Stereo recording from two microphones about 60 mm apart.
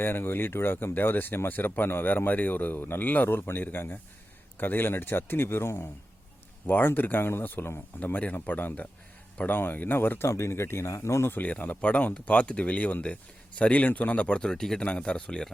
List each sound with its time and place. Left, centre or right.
0.0 s speech: left
10.2 s speech: left
11.3 s speech: left; by 15.5 s centre